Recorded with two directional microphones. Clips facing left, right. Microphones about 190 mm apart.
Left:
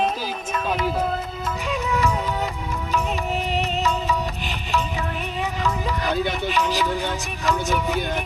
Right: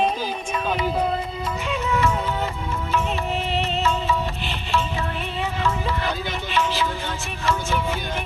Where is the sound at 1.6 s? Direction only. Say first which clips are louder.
Even; 15° left (ahead or behind).